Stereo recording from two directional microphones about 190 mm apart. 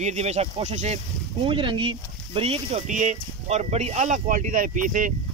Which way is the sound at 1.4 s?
25° right (ahead or behind).